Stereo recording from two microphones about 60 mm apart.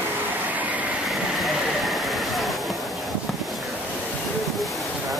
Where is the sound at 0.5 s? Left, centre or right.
Right.